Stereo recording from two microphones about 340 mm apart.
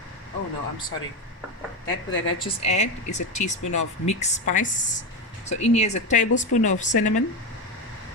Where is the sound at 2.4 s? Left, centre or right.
Centre.